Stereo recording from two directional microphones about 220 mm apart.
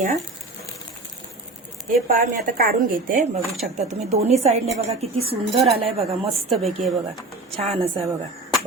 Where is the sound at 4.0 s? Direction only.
30° right (ahead or behind).